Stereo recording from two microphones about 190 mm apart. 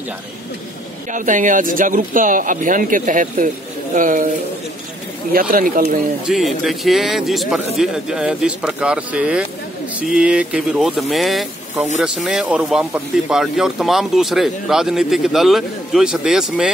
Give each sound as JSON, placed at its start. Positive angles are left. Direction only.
{"t": 1.1, "sound": "speech", "side_deg": -45}
{"t": 5.3, "sound": "speech", "side_deg": -50}
{"t": 6.2, "sound": "speech", "side_deg": 0}